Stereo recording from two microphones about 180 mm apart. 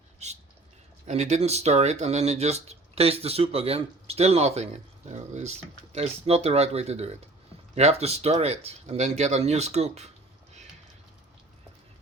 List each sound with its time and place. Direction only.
1.0 s speech: 40° right (ahead or behind)